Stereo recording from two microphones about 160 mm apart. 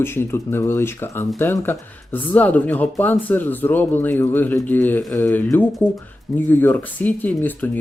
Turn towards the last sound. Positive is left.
turn(degrees=10)  # may be behind; listen again after turning